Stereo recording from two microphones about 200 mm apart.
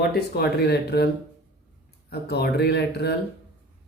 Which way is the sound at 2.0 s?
55° left (ahead or behind).